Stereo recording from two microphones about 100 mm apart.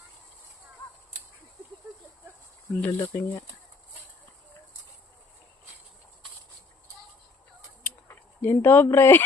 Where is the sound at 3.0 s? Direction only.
30° left (ahead or behind).